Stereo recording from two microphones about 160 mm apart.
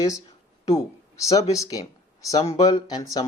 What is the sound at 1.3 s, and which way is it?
Speech, 20° left (ahead or behind).